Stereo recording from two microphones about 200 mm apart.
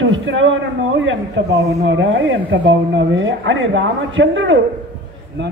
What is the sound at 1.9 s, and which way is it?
Speech, 70° right (ahead or behind).